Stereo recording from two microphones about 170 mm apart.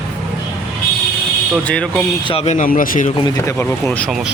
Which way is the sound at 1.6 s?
5° left (ahead or behind).